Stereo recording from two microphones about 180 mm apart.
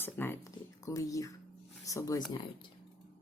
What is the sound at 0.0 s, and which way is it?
Speech, 10° left (ahead or behind).